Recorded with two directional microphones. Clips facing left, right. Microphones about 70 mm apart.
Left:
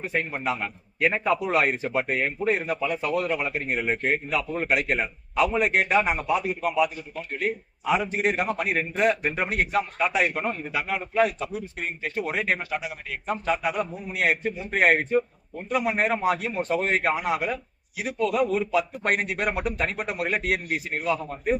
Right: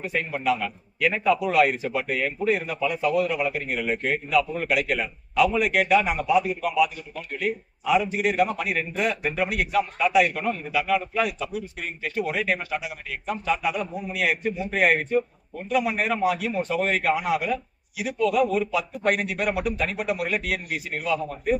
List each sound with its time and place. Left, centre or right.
0.0 s a man's voice: left